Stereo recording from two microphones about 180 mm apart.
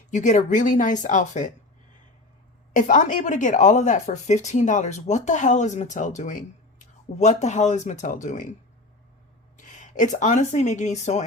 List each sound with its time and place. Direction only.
0.1 s speech: 45° left (ahead or behind)
2.7 s speech: 45° left (ahead or behind)
9.6 s speech: 45° left (ahead or behind)